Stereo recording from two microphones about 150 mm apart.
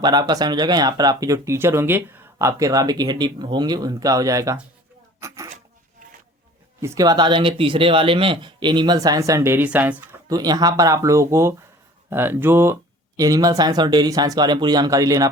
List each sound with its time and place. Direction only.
0.0 s speech: 25° right (ahead or behind)
6.8 s speech: 25° right (ahead or behind)
10.2 s speech: 25° right (ahead or behind)